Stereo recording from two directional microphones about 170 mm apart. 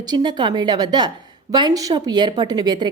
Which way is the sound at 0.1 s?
25° right (ahead or behind).